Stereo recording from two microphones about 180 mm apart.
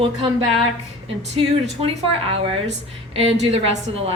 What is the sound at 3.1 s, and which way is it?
Speech, 35° right (ahead or behind).